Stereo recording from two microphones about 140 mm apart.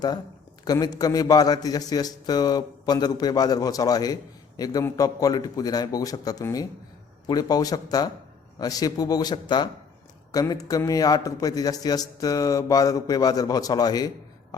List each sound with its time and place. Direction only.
0.6 s a man's voice: 25° left (ahead or behind)